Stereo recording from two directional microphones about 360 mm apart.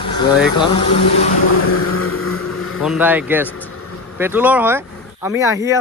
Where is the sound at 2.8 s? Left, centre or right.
Centre.